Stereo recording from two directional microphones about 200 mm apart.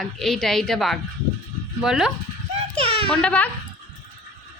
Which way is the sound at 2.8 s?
25° right (ahead or behind).